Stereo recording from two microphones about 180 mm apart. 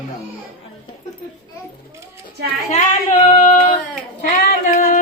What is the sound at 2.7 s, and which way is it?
Female singing, 40° left (ahead or behind).